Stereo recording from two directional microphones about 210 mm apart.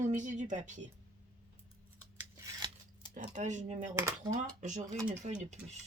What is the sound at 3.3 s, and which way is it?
Speech, 35° right (ahead or behind).